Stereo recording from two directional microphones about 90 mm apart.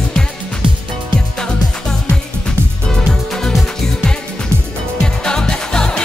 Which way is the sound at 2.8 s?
5° left (ahead or behind).